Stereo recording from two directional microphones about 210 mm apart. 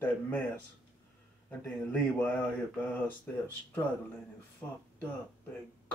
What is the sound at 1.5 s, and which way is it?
Speech, 5° left (ahead or behind).